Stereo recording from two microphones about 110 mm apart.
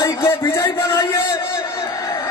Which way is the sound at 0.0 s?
25° left (ahead or behind).